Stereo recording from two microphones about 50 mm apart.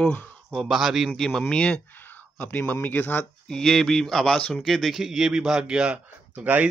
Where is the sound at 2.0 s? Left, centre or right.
Left.